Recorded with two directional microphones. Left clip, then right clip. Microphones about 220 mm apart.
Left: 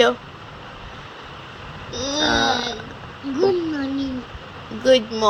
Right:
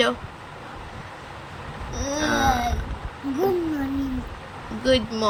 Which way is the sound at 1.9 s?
15° right (ahead or behind).